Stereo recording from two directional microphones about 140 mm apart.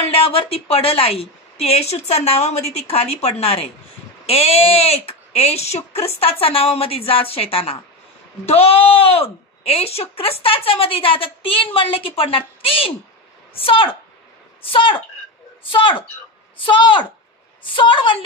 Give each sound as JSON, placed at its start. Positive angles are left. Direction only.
{"t": 0.0, "sound": "a woman's voice", "side_deg": 45}